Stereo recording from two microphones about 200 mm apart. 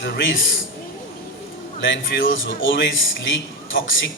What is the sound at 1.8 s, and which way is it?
A man's voice, 70° left (ahead or behind).